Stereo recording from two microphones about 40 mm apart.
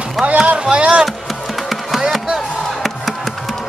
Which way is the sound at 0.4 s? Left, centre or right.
Right.